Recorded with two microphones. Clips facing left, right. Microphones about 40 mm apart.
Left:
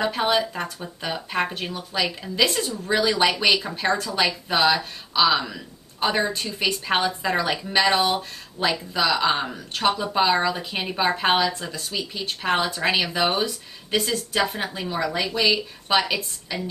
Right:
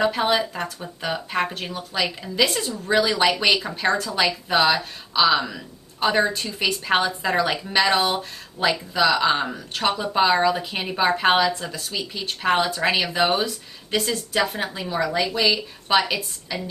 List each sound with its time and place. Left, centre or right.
0.0 s a woman's voice: centre